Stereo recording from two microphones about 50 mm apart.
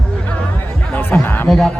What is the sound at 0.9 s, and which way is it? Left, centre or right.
Speech, left.